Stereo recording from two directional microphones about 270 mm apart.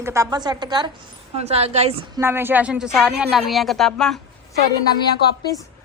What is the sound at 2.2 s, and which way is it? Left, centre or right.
Speech, centre.